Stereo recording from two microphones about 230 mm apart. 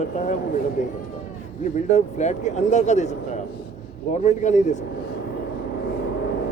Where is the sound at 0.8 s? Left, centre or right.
Left.